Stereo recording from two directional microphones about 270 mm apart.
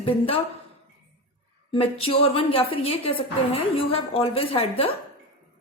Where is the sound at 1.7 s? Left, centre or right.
Left.